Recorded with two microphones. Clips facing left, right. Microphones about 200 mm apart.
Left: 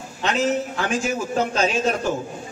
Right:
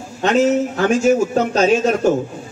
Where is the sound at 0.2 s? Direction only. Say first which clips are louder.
Right 7 dB; 45° right (ahead or behind).